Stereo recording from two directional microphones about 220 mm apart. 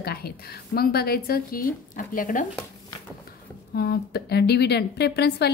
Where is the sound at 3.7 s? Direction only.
45° left (ahead or behind).